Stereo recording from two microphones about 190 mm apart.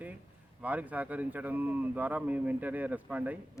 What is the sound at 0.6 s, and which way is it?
Speech, 10° right (ahead or behind).